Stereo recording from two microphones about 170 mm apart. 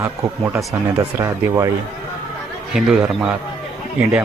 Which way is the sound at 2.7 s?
5° right (ahead or behind).